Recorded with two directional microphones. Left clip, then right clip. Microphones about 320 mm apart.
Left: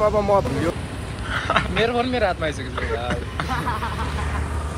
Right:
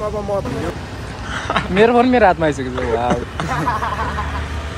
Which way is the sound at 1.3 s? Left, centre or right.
Centre.